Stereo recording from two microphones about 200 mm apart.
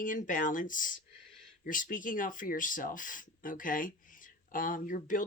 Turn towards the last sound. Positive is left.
turn(degrees=40)  # may be behind; listen again after turning